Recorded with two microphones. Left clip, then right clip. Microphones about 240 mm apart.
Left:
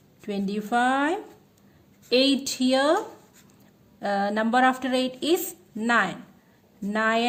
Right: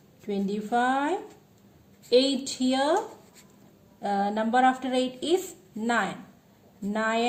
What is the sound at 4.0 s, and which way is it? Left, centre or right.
Speech, left.